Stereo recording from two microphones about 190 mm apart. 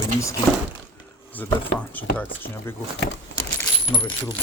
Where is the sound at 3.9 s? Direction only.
25° left (ahead or behind).